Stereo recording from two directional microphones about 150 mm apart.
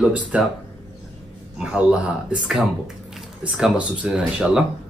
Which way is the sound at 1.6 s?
5° right (ahead or behind).